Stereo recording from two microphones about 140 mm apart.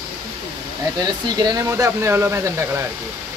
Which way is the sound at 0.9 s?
30° right (ahead or behind).